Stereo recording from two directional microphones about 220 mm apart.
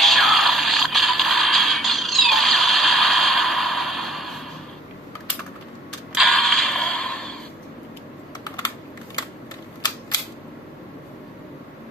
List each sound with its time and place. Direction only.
0.0 s music: centre (ahead or behind)
6.1 s mechanisms: centre (ahead or behind)
8.5 s computer keyboard: 15° left (ahead or behind)